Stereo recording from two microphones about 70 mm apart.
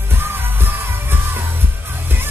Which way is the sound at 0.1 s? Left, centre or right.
Right.